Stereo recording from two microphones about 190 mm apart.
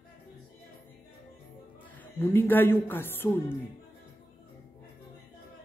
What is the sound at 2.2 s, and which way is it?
Speech, 10° left (ahead or behind).